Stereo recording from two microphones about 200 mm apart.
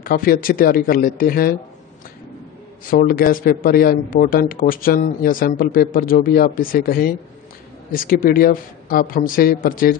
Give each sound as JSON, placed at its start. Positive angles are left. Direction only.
{"t": 0.0, "sound": "speech", "side_deg": 45}
{"t": 2.9, "sound": "speech", "side_deg": 45}